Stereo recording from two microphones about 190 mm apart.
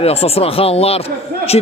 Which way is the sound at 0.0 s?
30° left (ahead or behind).